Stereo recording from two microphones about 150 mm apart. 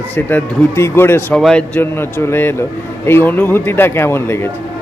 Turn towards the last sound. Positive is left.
turn(degrees=15)  # may be behind; listen again after turning